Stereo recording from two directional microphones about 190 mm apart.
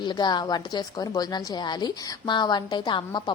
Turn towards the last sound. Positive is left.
turn(degrees=20)  # may be behind; listen again after turning